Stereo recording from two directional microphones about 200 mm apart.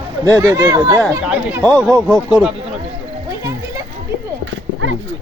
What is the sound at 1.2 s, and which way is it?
Speech, 5° right (ahead or behind).